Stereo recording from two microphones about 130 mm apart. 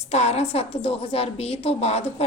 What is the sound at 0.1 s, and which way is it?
A woman's voice, 55° left (ahead or behind).